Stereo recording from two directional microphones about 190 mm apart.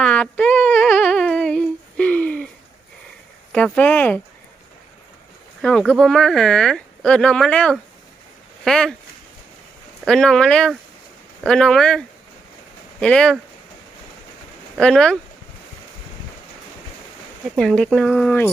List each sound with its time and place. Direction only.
0.0 s a sound: 5° left (ahead or behind)
3.5 s speech: 5° left (ahead or behind)
5.6 s speech: 5° left (ahead or behind)
10.1 s speech: 5° left (ahead or behind)
14.8 s speech: 5° left (ahead or behind)
17.6 s speech: centre (ahead or behind)